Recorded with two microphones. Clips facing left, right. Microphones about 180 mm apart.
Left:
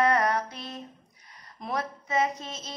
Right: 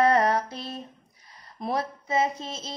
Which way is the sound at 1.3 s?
30° right (ahead or behind).